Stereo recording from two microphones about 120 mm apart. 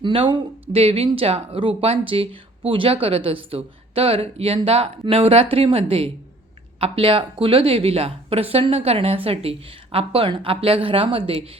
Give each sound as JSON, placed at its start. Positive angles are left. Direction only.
{"t": 0.0, "sound": "speech", "side_deg": -45}